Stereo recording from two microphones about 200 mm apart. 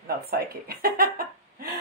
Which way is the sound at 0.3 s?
45° right (ahead or behind).